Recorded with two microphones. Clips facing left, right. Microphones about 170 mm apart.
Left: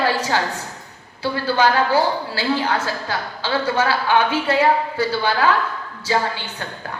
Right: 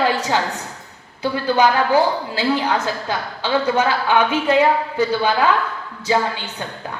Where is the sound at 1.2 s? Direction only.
20° right (ahead or behind).